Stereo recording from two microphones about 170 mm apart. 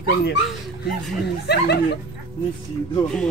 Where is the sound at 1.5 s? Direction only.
75° left (ahead or behind).